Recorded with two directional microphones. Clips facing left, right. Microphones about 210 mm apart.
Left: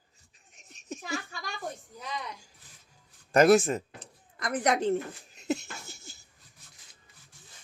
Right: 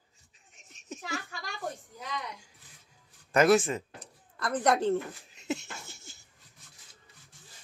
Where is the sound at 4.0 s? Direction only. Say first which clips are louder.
Right 1 dB; 15° left (ahead or behind).